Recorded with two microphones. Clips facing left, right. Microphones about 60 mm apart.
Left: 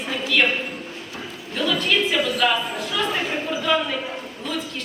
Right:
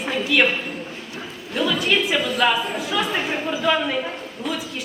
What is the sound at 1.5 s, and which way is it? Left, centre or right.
Chatter, centre.